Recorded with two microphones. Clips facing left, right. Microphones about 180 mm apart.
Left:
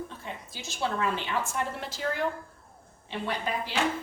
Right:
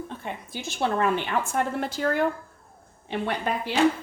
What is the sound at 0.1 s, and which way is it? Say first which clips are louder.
A woman's voice: right 6 dB; 60° right (ahead or behind).